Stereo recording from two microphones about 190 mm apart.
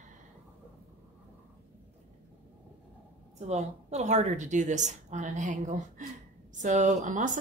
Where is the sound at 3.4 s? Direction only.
35° right (ahead or behind).